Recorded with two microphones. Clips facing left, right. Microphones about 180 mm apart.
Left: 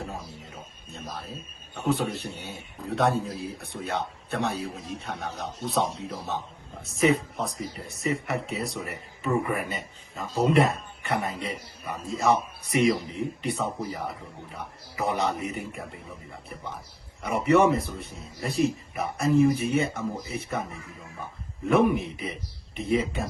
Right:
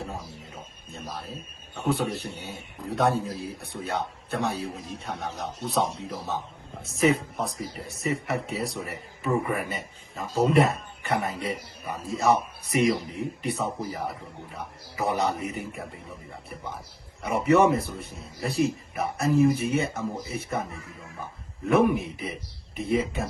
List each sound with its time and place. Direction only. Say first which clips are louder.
0.0 s music: even; centre (ahead or behind)
1.7 s a man's voice: even; centre (ahead or behind)
2.3 s a man's voice: right 1 dB; 15° right (ahead or behind)
2.8 s speech: even; centre (ahead or behind)
15.0 s speech: right 1 dB; centre (ahead or behind)
17.4 s speech: even; centre (ahead or behind)
21.7 s speech: even; centre (ahead or behind)